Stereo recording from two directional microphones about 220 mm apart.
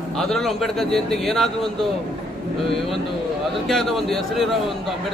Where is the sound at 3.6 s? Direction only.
Centre (ahead or behind).